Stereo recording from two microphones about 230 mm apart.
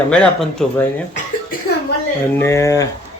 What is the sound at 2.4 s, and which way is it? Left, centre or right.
Speech, centre.